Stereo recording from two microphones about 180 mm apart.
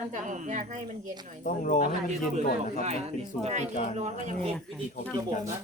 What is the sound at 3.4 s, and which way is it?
Speech, 40° right (ahead or behind).